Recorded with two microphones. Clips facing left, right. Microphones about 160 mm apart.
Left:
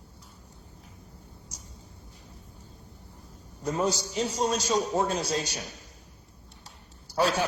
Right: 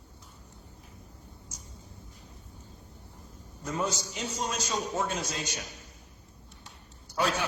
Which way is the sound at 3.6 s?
35° left (ahead or behind).